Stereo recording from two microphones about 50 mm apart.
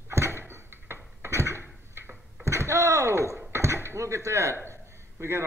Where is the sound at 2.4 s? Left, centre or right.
Right.